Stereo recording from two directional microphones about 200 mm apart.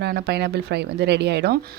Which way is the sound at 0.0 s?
55° right (ahead or behind).